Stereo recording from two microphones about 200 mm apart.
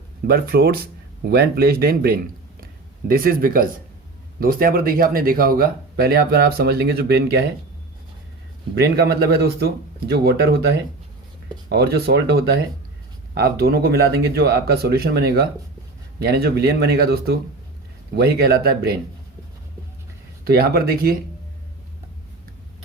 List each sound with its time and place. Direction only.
0.3 s speech: 50° right (ahead or behind)
8.7 s speech: 55° right (ahead or behind)
20.4 s speech: 50° right (ahead or behind)